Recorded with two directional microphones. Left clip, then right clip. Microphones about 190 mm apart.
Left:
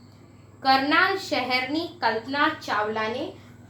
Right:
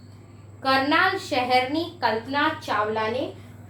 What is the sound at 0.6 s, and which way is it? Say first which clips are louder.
A child's voice: left 1 dB; 20° left (ahead or behind).